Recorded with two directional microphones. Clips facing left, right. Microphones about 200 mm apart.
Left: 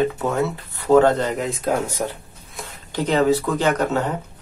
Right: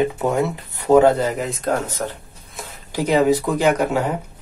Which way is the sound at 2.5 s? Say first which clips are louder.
Right 1 dB; 5° right (ahead or behind).